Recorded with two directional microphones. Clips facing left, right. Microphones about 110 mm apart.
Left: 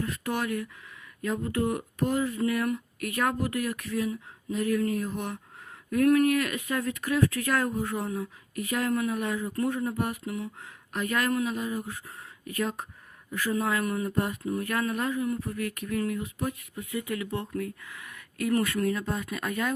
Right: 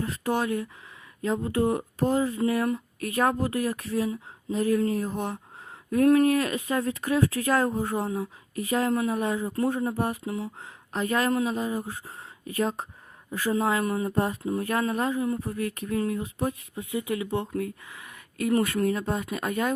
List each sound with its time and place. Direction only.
0.0 s speech: 30° right (ahead or behind)